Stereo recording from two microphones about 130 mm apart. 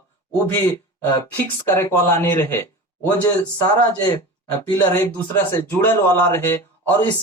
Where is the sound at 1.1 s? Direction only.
20° left (ahead or behind).